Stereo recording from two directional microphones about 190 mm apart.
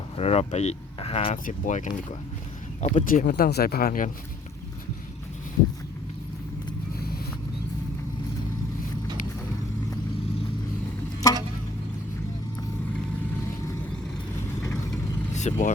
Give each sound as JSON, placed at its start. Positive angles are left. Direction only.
{"t": 0.2, "sound": "speech", "side_deg": 35}
{"t": 1.5, "sound": "speech", "side_deg": 40}
{"t": 11.2, "sound": "a sound", "side_deg": 20}
{"t": 15.3, "sound": "vehicle", "side_deg": 40}